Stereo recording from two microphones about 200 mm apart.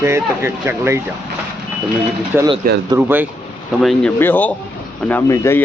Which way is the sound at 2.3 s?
20° right (ahead or behind).